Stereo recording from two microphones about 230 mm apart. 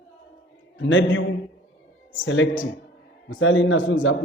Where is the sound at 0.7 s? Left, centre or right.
Left.